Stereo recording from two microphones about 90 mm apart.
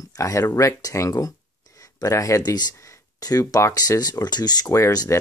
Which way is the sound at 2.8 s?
40° left (ahead or behind).